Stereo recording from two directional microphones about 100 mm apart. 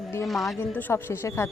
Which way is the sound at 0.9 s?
25° left (ahead or behind).